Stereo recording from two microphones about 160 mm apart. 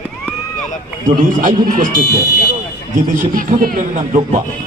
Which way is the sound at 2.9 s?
55° right (ahead or behind).